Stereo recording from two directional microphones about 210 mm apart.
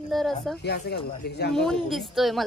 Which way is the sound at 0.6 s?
50° left (ahead or behind).